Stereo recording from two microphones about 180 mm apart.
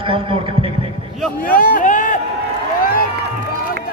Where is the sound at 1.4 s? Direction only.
50° left (ahead or behind).